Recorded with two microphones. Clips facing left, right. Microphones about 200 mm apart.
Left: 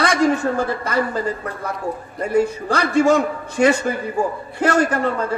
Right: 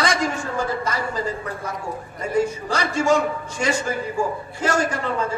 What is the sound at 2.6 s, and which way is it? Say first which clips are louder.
A man's voice: left 5 dB; 60° left (ahead or behind).